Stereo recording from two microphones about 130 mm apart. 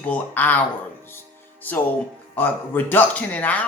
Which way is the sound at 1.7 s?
15° left (ahead or behind).